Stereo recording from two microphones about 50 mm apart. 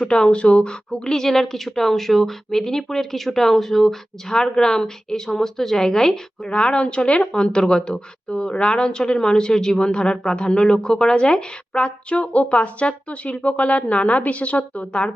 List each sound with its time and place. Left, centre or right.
0.1 s a woman's voice: centre